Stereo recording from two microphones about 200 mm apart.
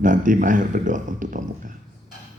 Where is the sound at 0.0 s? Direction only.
40° right (ahead or behind).